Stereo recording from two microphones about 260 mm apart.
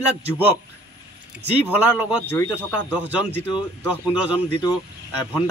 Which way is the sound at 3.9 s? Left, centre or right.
Centre.